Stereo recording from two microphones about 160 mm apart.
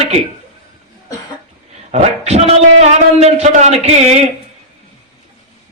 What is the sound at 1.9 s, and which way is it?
A man's voice, 40° right (ahead or behind).